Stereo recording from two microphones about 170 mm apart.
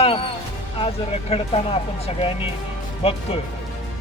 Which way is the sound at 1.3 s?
35° left (ahead or behind).